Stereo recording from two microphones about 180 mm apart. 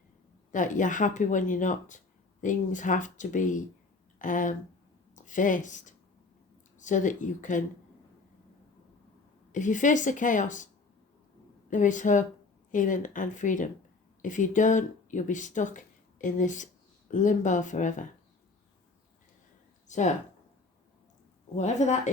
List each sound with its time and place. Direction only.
0.5 s speech: 45° left (ahead or behind)
9.5 s speech: 45° left (ahead or behind)
11.7 s speech: 45° left (ahead or behind)
19.9 s speech: 40° left (ahead or behind)
21.5 s speech: 40° left (ahead or behind)